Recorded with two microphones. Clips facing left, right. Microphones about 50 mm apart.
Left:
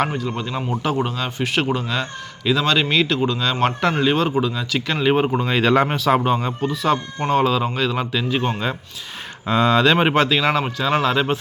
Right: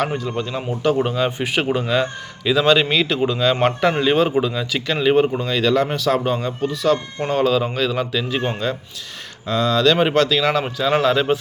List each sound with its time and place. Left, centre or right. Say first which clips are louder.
0.1 s a man's voice: right 1 dB; centre
0.9 s a man's voice: right 3 dB; centre; by 5.9 s left
6.2 s a man's voice: left 1 dB; centre
9.5 s speech: left 1 dB; left
10.5 s a man's voice: right 1 dB; centre